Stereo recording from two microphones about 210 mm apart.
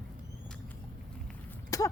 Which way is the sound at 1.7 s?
15° left (ahead or behind).